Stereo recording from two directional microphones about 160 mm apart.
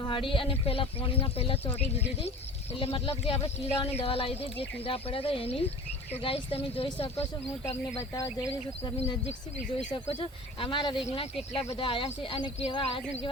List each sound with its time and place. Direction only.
0.0 s speech: 30° left (ahead or behind)
8.8 s speech: 35° left (ahead or behind)